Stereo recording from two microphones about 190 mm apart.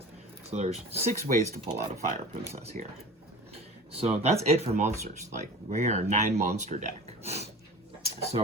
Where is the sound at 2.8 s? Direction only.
40° right (ahead or behind).